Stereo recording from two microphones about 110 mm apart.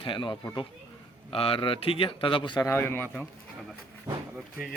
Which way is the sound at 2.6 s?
20° left (ahead or behind).